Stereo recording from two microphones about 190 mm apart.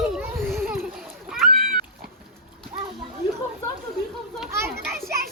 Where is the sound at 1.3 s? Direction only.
Centre (ahead or behind).